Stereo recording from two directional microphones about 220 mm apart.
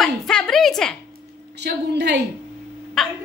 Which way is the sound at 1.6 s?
50° right (ahead or behind).